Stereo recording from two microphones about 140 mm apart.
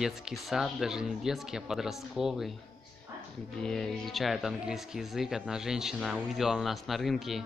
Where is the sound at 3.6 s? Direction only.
5° left (ahead or behind).